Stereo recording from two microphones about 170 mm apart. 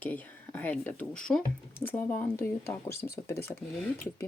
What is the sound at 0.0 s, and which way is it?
Speech, 10° left (ahead or behind).